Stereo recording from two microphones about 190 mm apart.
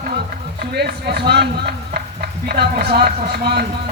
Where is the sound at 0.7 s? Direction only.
60° right (ahead or behind).